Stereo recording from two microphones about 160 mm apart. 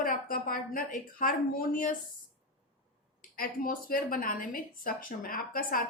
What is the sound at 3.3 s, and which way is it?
A woman's voice, 60° left (ahead or behind).